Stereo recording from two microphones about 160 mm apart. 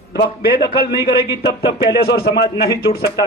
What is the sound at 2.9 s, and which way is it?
Speech, 45° left (ahead or behind).